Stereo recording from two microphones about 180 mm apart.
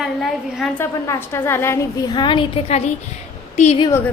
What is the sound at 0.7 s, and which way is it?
A woman's voice, 15° left (ahead or behind).